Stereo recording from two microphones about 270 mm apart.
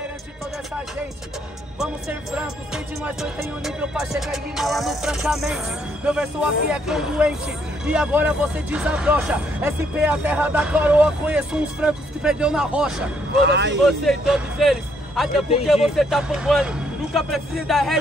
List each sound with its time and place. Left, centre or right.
1.8 s speech: centre
13.5 s speech: right
13.8 s speech: centre